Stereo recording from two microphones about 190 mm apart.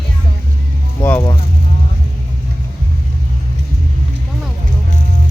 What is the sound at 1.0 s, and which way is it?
Speech, 10° left (ahead or behind).